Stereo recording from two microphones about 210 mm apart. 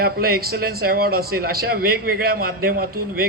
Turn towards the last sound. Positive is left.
turn(degrees=-45)  # may be behind; listen again after turning